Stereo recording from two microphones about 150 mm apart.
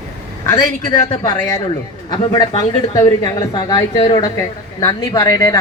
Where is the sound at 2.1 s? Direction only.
25° left (ahead or behind).